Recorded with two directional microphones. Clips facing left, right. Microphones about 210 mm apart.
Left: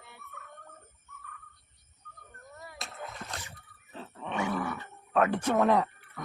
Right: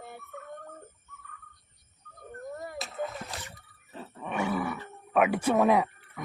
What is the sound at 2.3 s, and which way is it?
Music, 45° right (ahead or behind).